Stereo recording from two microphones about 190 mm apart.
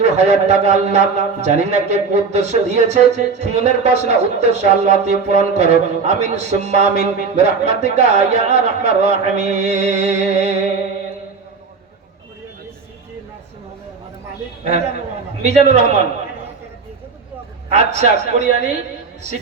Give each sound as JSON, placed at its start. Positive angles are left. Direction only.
{"t": 0.0, "sound": "speech", "side_deg": -35}
{"t": 15.4, "sound": "speech", "side_deg": -35}
{"t": 17.7, "sound": "speech", "side_deg": -35}